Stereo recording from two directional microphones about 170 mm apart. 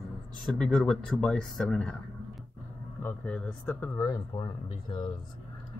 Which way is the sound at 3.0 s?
10° left (ahead or behind).